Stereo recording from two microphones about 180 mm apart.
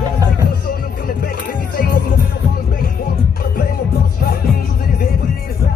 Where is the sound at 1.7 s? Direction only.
50° left (ahead or behind).